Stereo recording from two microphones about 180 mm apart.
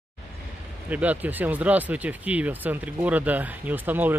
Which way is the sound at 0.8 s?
10° right (ahead or behind).